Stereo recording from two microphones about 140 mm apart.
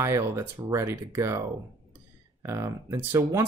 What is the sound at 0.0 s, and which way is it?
Speech, 20° right (ahead or behind).